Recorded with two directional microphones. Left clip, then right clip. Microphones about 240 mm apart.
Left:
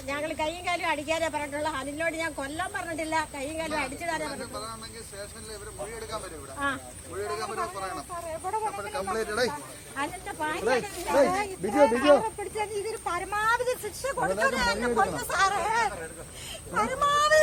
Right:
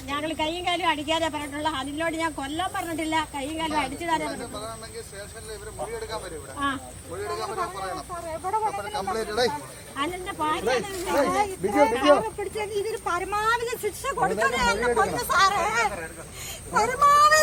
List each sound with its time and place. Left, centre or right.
0.1 s a woman's voice: centre
8.3 s speech: centre
8.9 s speech: left
10.0 s a woman's voice: centre
16.7 s speech: centre